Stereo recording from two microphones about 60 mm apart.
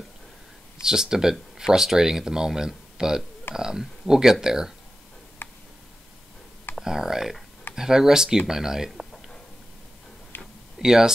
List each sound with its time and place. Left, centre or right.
0.8 s speech: centre
5.4 s tick: left
6.8 s speech: centre
10.3 s a sound: left
10.8 s speech: centre